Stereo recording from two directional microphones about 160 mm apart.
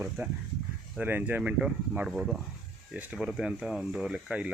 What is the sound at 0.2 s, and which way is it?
Speech, 15° right (ahead or behind).